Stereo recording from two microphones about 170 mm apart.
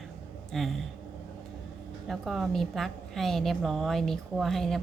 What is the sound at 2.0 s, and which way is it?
A woman's voice, centre (ahead or behind).